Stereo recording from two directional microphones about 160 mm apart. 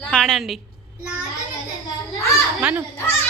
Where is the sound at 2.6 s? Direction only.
10° right (ahead or behind).